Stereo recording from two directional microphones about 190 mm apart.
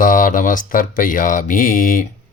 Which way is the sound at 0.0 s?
45° left (ahead or behind).